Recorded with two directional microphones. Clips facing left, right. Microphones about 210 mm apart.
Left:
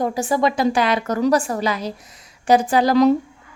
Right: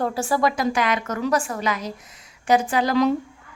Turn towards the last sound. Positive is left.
turn(degrees=35)  # may be behind; listen again after turning